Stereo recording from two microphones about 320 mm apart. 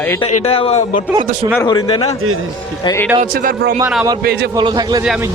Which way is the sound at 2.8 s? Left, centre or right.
Centre.